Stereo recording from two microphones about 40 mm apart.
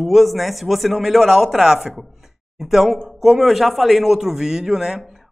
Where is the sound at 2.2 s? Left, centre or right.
Centre.